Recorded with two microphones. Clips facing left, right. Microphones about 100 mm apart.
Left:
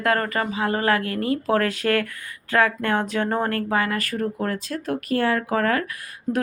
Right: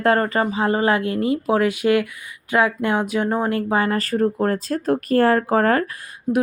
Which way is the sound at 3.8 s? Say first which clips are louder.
Right 5 dB; 35° right (ahead or behind).